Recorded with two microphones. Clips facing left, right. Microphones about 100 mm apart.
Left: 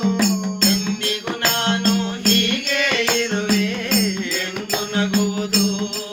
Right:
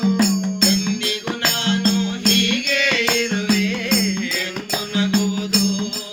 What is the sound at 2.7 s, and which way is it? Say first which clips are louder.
Music: even; 50° left (ahead or behind).